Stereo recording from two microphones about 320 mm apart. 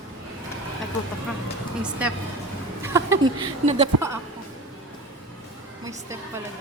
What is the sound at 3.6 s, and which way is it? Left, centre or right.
Speech, right.